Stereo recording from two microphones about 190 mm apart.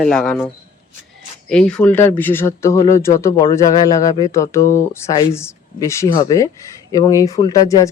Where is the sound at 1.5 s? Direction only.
5° left (ahead or behind).